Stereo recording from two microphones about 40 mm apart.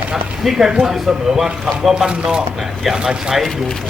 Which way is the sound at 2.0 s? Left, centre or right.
Right.